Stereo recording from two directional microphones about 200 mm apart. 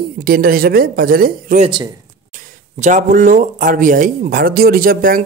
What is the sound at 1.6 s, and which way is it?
Speech, 25° right (ahead or behind).